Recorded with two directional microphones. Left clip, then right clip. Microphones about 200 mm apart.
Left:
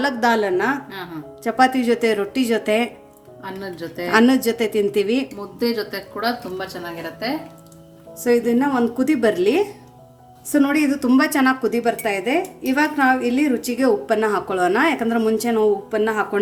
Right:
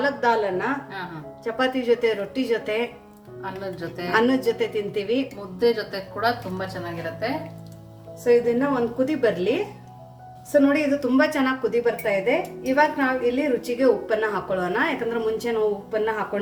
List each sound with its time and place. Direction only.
0.0 s a woman's voice: 65° left (ahead or behind)
3.4 s a woman's voice: 25° left (ahead or behind)
4.1 s a woman's voice: 65° left (ahead or behind)
5.5 s a woman's voice: 30° left (ahead or behind)
8.2 s a woman's voice: 65° left (ahead or behind)